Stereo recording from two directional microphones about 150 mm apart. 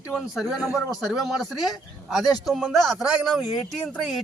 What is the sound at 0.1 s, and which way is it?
Speech, centre (ahead or behind).